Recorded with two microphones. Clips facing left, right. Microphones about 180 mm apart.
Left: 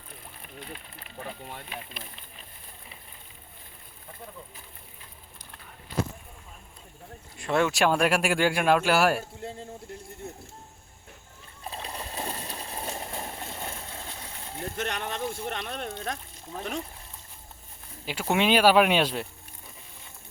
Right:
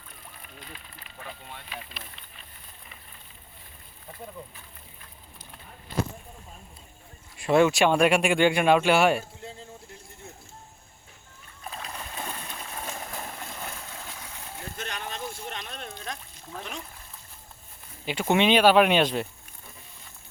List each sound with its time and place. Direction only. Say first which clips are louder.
7.3 s speech: right 4 dB; 5° right (ahead or behind)
11.6 s a sound: left 1 dB; 30° left (ahead or behind)
14.8 s speech: left 4 dB; 60° left (ahead or behind)
18.0 s speech: right 3 dB; centre (ahead or behind)